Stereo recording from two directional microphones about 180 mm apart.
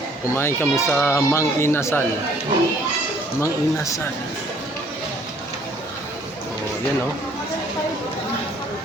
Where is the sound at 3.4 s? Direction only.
15° left (ahead or behind).